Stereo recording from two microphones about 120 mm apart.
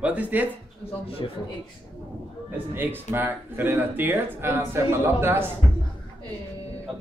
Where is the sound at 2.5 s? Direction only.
15° right (ahead or behind).